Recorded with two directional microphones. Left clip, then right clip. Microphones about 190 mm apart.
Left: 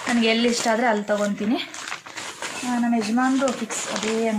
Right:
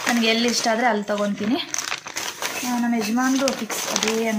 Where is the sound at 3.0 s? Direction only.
10° right (ahead or behind).